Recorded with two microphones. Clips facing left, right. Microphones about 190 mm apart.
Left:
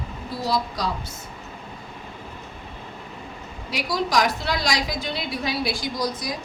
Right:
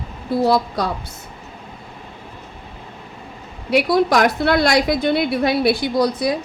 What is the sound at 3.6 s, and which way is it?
Speech, 60° right (ahead or behind).